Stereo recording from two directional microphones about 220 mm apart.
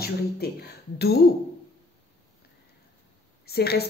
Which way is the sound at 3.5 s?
45° left (ahead or behind).